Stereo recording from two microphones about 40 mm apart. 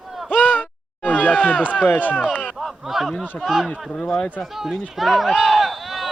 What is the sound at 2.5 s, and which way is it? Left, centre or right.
Speech, centre.